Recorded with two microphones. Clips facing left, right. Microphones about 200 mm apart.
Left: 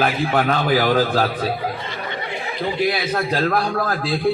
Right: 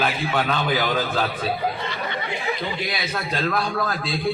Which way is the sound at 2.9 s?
55° left (ahead or behind).